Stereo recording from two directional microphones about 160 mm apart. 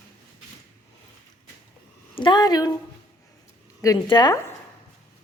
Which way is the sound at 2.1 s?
30° left (ahead or behind).